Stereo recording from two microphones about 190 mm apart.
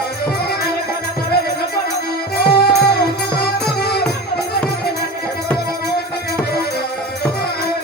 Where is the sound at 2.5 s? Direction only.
55° left (ahead or behind).